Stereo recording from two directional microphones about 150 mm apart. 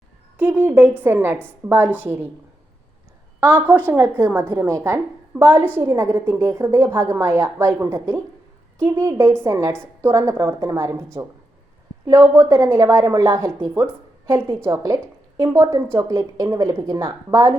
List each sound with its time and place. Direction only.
0.3 s speech: 10° right (ahead or behind)
3.4 s a woman's voice: 10° right (ahead or behind)